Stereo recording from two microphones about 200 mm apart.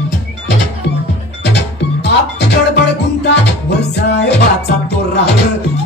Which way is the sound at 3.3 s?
60° left (ahead or behind).